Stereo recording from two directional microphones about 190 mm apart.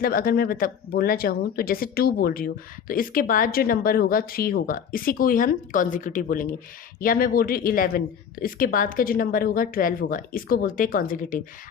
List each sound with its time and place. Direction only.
0.0 s speech: 50° left (ahead or behind)